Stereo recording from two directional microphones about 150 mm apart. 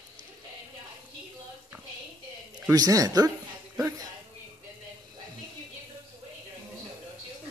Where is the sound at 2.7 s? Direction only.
25° right (ahead or behind).